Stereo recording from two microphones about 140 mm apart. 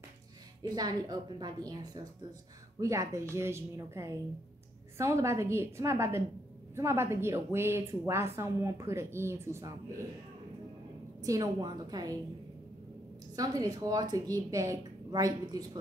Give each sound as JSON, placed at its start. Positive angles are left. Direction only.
{"t": 0.6, "sound": "a woman's voice", "side_deg": -30}
{"t": 11.1, "sound": "a woman's voice", "side_deg": -25}
{"t": 13.4, "sound": "a woman's voice", "side_deg": -30}